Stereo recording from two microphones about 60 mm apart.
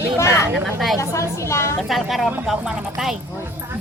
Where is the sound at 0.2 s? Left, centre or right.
Left.